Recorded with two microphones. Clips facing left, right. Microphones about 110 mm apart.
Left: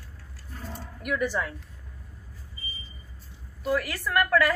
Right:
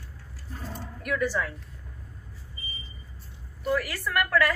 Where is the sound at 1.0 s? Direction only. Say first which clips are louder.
Even; 15° left (ahead or behind).